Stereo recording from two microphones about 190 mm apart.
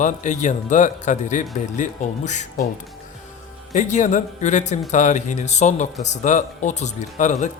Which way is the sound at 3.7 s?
40° left (ahead or behind).